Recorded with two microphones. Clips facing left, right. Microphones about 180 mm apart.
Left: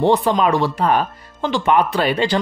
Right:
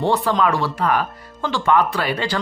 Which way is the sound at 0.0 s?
20° left (ahead or behind).